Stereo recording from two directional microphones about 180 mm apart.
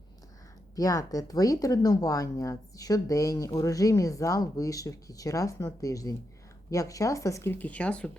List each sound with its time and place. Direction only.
0.8 s a woman's voice: 20° left (ahead or behind)